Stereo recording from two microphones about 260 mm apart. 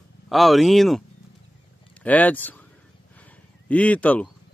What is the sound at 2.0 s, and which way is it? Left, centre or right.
Speech, centre.